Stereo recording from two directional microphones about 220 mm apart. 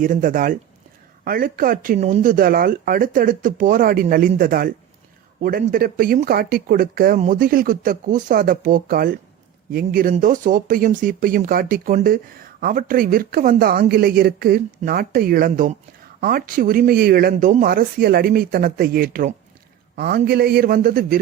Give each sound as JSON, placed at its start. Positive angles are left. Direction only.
{"t": 0.0, "sound": "a man's voice", "side_deg": -35}